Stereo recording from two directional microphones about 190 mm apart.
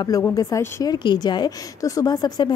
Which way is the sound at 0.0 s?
20° left (ahead or behind).